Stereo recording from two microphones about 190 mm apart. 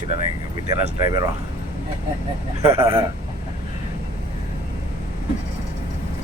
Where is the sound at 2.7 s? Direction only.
15° right (ahead or behind).